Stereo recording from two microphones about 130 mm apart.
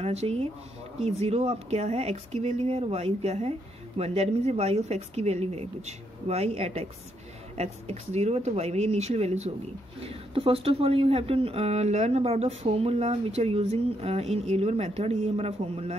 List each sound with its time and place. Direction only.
0.0 s speech: 55° right (ahead or behind)